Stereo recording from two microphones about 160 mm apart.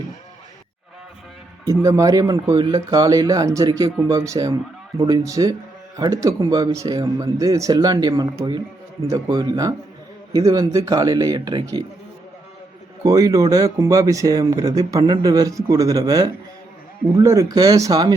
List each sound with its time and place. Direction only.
1.6 s speech: 20° right (ahead or behind)
13.0 s speech: 20° right (ahead or behind)